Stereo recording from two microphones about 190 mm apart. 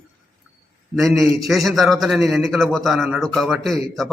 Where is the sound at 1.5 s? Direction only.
Centre (ahead or behind).